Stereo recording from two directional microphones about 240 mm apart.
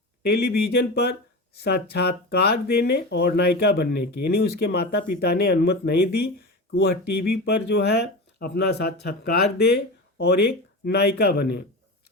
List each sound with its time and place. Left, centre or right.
0.2 s speech: left
10.8 s speech: left